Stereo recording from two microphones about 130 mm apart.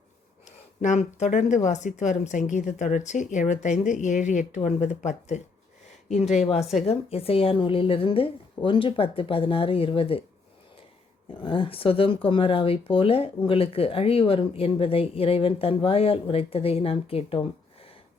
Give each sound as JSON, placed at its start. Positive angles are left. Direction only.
{"t": 0.8, "sound": "speech", "side_deg": 65}
{"t": 11.4, "sound": "speech", "side_deg": 40}